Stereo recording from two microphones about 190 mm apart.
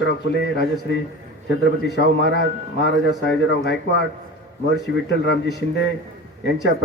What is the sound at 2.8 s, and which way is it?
A man's voice, 65° left (ahead or behind).